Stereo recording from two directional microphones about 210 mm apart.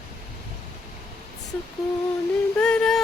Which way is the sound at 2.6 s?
5° left (ahead or behind).